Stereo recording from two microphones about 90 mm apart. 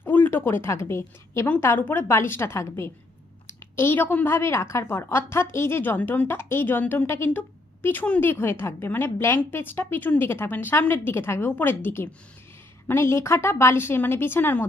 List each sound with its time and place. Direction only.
0.0 s a woman's voice: 20° left (ahead or behind)
7.3 s a sound: 20° left (ahead or behind)
8.2 s a woman's voice: 25° left (ahead or behind)